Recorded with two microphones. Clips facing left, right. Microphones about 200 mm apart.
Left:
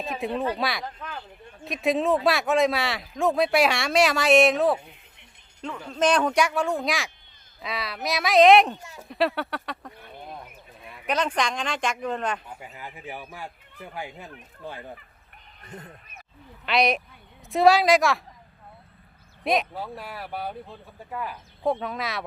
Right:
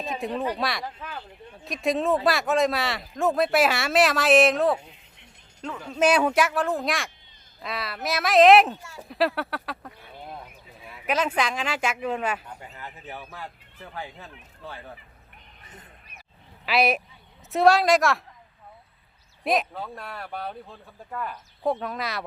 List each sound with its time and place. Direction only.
0.0 s speech: centre (ahead or behind)
12.5 s speech: 10° left (ahead or behind)
15.6 s speech: 45° left (ahead or behind)
16.6 s speech: 5° right (ahead or behind)
19.5 s speech: centre (ahead or behind)